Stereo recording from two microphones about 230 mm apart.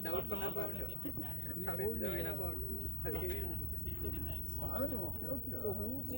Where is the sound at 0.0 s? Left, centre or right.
Left.